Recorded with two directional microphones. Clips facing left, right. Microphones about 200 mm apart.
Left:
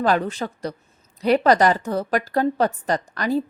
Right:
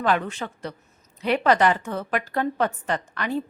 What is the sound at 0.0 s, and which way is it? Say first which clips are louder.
A woman's voice: left 3 dB; 35° left (ahead or behind).